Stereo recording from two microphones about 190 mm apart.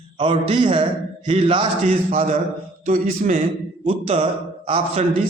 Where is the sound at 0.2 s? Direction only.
30° right (ahead or behind).